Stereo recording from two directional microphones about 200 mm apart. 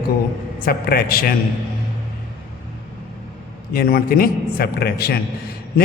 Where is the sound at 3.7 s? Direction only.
50° left (ahead or behind).